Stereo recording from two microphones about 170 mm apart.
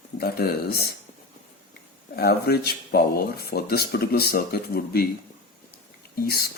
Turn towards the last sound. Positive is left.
turn(degrees=65)  # may be behind; listen again after turning